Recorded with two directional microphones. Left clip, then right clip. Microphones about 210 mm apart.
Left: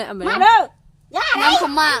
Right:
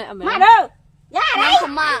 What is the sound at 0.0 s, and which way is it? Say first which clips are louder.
Speech: left 3 dB; 25° left (ahead or behind).